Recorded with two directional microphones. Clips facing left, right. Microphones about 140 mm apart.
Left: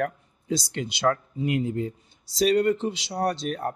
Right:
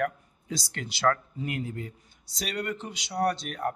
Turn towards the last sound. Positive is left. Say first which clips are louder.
# left 1 dB
turn(degrees=30)  # may be behind; listen again after turning